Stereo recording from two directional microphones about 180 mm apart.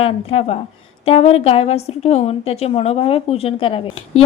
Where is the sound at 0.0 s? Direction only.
35° left (ahead or behind).